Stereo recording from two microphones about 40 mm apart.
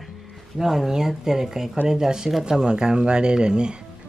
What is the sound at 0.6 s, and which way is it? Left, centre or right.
Speech, centre.